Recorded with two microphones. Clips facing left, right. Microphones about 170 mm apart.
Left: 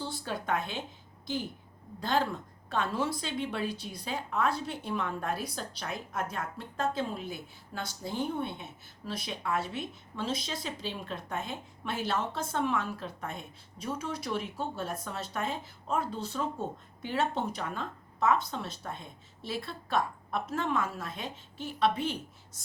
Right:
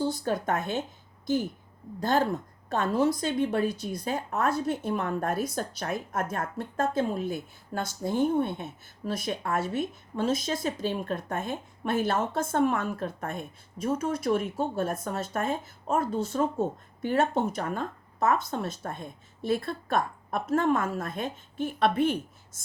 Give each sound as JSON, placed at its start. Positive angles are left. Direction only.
{"t": 0.0, "sound": "a woman's voice", "side_deg": -45}
{"t": 2.0, "sound": "a woman's voice", "side_deg": -45}